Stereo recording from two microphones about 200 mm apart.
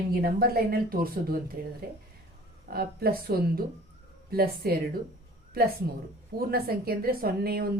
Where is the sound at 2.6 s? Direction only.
50° right (ahead or behind).